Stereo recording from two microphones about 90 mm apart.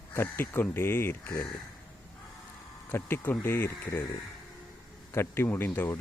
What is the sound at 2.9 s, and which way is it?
Speech, 25° left (ahead or behind).